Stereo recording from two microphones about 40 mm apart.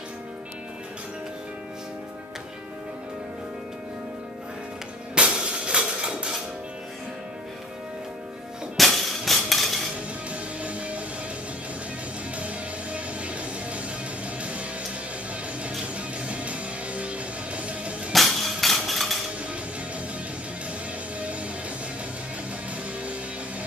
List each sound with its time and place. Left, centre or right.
5.1 s music: right
8.7 s a sound: centre
10.3 s music: right
12.4 s music: right
16.3 s music: right
18.1 s a sound: centre